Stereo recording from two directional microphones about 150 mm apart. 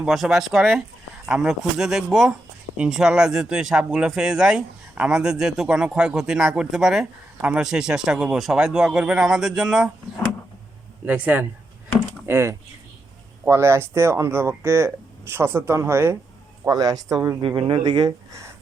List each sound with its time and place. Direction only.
0.0 s speech: centre (ahead or behind)
11.0 s speech: 10° right (ahead or behind); by 18.1 s 30° right (ahead or behind)